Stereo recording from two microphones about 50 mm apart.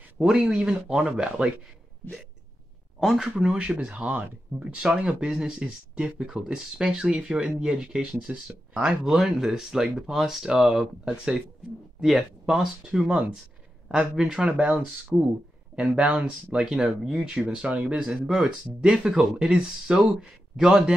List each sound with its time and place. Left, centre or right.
0.2 s speech: centre
3.2 s speech: centre
3.6 s speech: right
8.8 s speech: centre; by 16.3 s right
16.5 s speech: centre
18.0 s speech: centre